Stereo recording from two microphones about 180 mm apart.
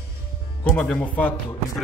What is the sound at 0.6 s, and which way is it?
Speech, 5° left (ahead or behind).